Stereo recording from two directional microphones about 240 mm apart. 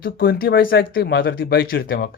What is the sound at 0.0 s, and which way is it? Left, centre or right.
Speech, left.